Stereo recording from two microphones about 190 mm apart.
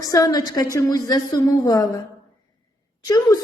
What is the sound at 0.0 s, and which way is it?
A woman's voice, 20° left (ahead or behind).